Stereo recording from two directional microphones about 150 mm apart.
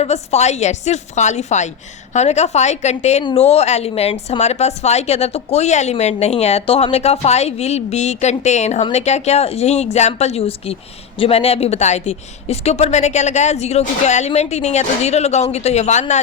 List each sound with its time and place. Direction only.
0.0 s a woman's voice: 45° left (ahead or behind)